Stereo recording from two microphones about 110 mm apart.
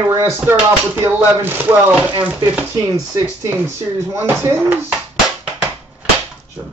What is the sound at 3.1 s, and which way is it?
Speech, 25° right (ahead or behind).